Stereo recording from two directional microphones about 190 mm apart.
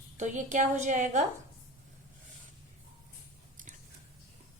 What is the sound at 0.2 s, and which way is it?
A woman's voice, 40° right (ahead or behind).